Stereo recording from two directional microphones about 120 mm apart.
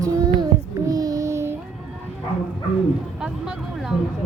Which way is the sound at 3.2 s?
5° right (ahead or behind).